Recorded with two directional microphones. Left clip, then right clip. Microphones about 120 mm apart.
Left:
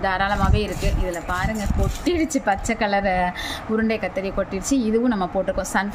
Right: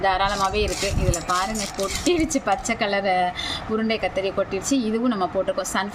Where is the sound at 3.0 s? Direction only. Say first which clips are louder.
Even; 15° left (ahead or behind).